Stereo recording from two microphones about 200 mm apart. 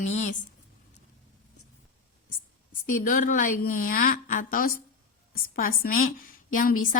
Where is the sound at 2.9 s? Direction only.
45° left (ahead or behind).